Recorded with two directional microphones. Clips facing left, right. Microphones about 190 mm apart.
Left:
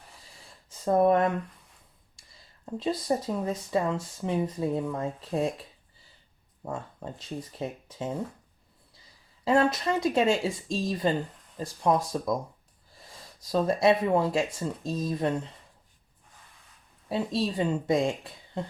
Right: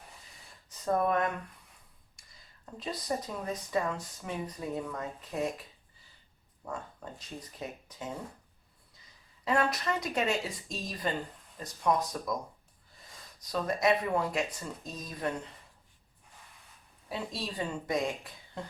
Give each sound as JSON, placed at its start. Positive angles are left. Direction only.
{"t": 0.9, "sound": "speech", "side_deg": 30}
{"t": 2.2, "sound": "a sound", "side_deg": 30}
{"t": 2.7, "sound": "speech", "side_deg": 25}
{"t": 6.7, "sound": "speech", "side_deg": 25}
{"t": 9.4, "sound": "speech", "side_deg": 25}
{"t": 13.5, "sound": "speech", "side_deg": 30}
{"t": 17.1, "sound": "speech", "side_deg": 25}